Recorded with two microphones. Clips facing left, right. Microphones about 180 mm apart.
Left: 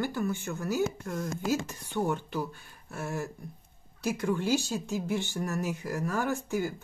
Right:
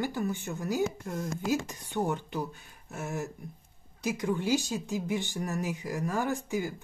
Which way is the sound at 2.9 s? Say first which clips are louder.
Left 1 dB; 20° right (ahead or behind).